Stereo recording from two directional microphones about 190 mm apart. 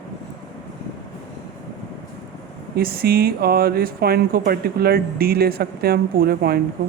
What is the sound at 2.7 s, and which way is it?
Speech, 55° right (ahead or behind).